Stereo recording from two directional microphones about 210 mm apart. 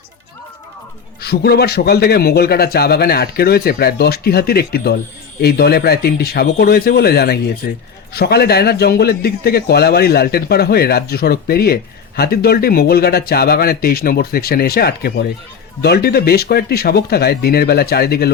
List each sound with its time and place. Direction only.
1.2 s speech: 50° left (ahead or behind)